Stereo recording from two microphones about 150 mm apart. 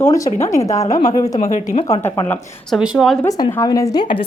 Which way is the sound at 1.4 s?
45° left (ahead or behind).